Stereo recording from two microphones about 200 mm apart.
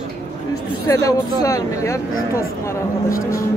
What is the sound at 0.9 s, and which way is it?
Speech, 15° left (ahead or behind).